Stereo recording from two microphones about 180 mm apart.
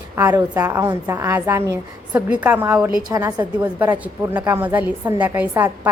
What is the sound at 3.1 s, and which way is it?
Speech, 20° right (ahead or behind).